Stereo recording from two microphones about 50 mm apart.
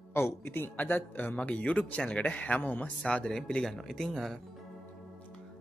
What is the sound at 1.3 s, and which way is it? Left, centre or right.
Speech, left.